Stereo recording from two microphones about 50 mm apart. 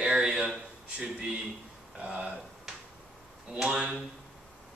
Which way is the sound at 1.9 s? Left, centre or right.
Right.